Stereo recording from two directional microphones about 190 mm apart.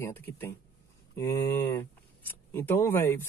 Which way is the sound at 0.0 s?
10° left (ahead or behind).